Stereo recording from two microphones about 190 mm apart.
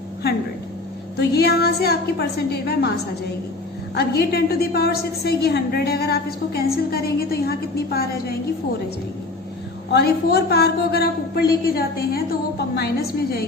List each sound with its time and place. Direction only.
1.2 s a woman's voice: 60° left (ahead or behind)
3.9 s a woman's voice: 55° left (ahead or behind)
9.9 s a woman's voice: 60° left (ahead or behind)